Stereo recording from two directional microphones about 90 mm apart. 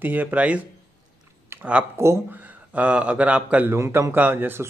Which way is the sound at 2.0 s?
30° right (ahead or behind).